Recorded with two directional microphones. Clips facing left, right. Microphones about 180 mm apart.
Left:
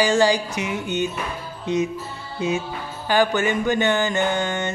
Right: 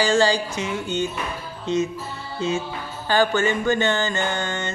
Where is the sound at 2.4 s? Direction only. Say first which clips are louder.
Left 1 dB; 15° left (ahead or behind).